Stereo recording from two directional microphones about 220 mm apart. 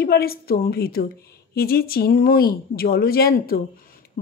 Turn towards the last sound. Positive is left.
turn(degrees=45)  # may be behind; listen again after turning